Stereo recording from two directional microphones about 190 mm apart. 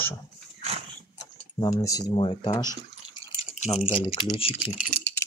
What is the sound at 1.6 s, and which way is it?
Speech, 15° left (ahead or behind).